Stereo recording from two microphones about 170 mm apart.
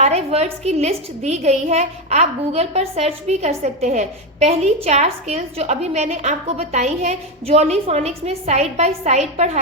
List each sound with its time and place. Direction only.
0.0 s a woman's voice: 40° right (ahead or behind)